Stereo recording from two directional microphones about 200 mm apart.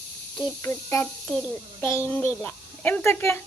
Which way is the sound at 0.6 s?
15° left (ahead or behind).